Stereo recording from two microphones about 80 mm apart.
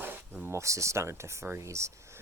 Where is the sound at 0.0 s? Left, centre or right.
Right.